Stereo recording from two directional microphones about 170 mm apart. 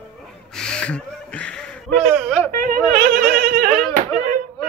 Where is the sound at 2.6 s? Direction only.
55° right (ahead or behind).